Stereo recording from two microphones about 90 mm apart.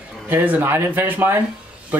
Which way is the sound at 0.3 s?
20° right (ahead or behind).